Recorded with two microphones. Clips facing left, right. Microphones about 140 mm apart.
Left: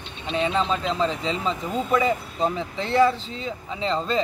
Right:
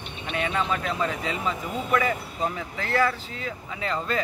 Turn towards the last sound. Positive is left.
turn(degrees=25)  # may be behind; listen again after turning